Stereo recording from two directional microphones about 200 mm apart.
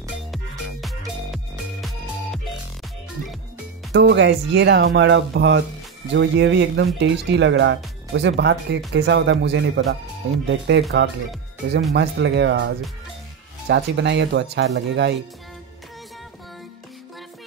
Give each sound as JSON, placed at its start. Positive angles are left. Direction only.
{"t": 0.3, "sound": "music", "side_deg": 0}
{"t": 3.9, "sound": "speech", "side_deg": -60}